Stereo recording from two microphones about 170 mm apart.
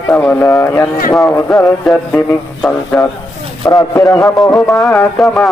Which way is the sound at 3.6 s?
20° left (ahead or behind).